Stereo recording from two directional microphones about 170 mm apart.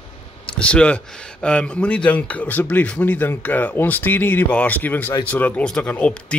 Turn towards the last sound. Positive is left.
turn(degrees=5)  # may be behind; listen again after turning